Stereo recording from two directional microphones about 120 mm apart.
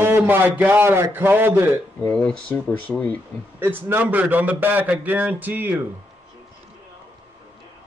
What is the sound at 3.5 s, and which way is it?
A man's voice, 15° right (ahead or behind).